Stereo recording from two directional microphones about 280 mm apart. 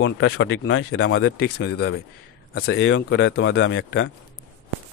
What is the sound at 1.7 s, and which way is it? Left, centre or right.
A man's voice, left.